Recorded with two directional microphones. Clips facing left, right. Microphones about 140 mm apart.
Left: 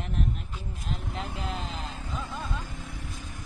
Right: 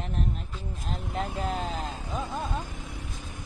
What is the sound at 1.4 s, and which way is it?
Speech, 45° right (ahead or behind).